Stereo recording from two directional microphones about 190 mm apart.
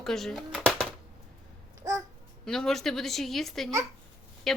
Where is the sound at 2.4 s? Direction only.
5° left (ahead or behind).